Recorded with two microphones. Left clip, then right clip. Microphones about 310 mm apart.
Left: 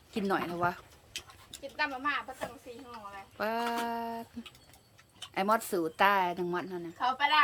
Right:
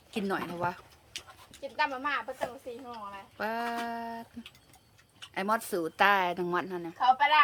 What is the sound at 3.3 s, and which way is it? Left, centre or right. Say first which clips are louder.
Speech: left 1 dB; centre.